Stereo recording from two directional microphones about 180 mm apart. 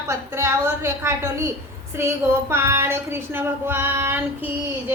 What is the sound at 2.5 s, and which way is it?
Speech, 15° right (ahead or behind).